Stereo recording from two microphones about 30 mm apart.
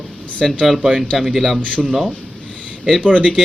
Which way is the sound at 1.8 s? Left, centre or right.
Centre.